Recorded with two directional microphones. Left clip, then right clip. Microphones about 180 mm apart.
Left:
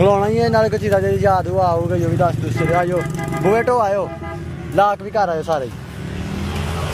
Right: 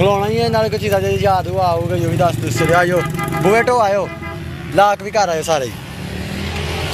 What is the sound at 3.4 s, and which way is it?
Speech, 5° left (ahead or behind).